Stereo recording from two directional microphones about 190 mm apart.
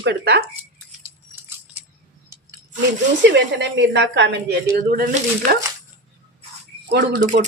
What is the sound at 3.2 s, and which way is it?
Speech, 65° right (ahead or behind).